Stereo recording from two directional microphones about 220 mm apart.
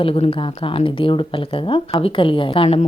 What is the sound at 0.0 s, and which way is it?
Speech, 25° left (ahead or behind).